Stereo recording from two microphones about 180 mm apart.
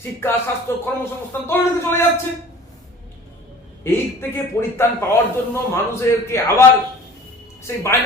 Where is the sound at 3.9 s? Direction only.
10° left (ahead or behind).